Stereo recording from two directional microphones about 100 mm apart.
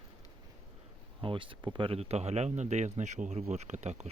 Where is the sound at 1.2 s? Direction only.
60° right (ahead or behind).